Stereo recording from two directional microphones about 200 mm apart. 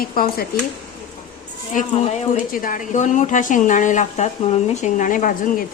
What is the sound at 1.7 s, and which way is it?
Speech, 35° left (ahead or behind).